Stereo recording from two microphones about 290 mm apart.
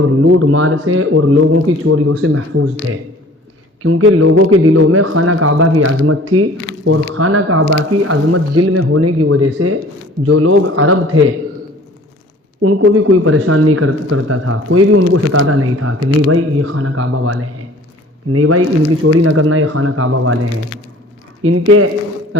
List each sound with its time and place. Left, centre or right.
0.0 s speech: right
3.8 s speech: right
12.6 s speech: right
21.4 s speech: right